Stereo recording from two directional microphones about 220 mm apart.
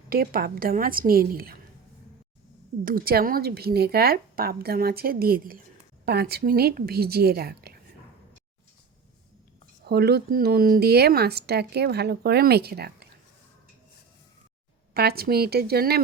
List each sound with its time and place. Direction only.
0.1 s a woman's voice: 40° right (ahead or behind)
2.8 s speech: 40° right (ahead or behind)
9.8 s speech: 45° right (ahead or behind)
14.9 s speech: 45° right (ahead or behind)